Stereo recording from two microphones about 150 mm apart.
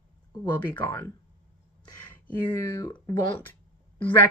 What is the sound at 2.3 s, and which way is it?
Speech, 15° left (ahead or behind).